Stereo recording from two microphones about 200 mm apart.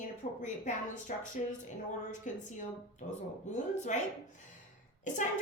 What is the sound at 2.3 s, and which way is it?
Speech, 40° left (ahead or behind).